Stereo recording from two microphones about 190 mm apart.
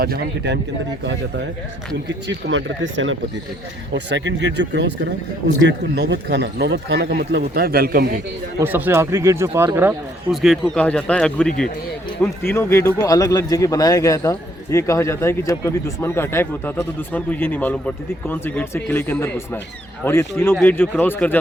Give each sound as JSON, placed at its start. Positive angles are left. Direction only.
{"t": 0.0, "sound": "speech", "side_deg": -55}
{"t": 2.2, "sound": "speech", "side_deg": -80}
{"t": 3.9, "sound": "speech", "side_deg": -70}
{"t": 8.5, "sound": "speech", "side_deg": -10}
{"t": 10.3, "sound": "speech", "side_deg": 0}